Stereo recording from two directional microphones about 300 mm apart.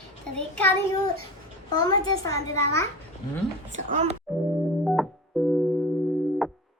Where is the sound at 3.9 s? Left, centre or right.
Right.